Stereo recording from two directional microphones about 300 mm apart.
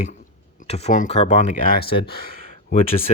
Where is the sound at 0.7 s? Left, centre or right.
Left.